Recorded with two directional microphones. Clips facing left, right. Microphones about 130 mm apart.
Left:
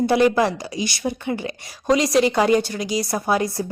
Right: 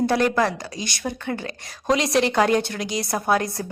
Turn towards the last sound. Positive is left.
turn(degrees=5)  # may be behind; listen again after turning